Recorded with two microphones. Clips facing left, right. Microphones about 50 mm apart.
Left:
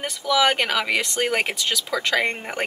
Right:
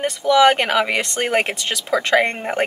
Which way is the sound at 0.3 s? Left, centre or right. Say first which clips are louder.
Right 6 dB; centre.